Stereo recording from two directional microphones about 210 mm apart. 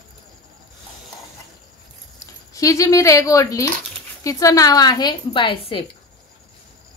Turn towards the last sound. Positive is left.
turn(degrees=25)  # may be behind; listen again after turning